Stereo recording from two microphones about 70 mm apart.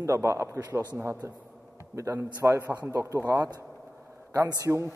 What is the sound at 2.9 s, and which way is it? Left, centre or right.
Speech, right.